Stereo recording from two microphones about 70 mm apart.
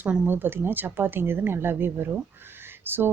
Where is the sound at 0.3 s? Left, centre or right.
Right.